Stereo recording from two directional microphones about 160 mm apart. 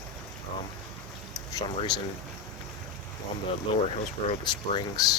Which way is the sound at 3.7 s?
35° left (ahead or behind).